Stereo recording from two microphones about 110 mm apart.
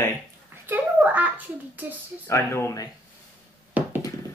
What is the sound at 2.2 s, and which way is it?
Speech, 25° left (ahead or behind).